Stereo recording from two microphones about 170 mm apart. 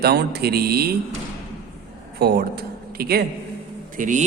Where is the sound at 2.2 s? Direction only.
70° right (ahead or behind).